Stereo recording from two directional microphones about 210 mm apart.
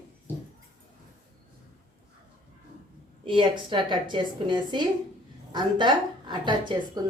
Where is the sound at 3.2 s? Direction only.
25° right (ahead or behind).